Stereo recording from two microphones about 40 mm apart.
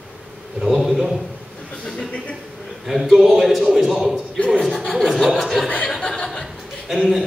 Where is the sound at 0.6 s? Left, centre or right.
Centre.